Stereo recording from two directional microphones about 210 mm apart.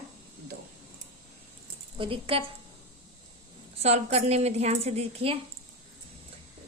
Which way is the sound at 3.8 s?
30° right (ahead or behind).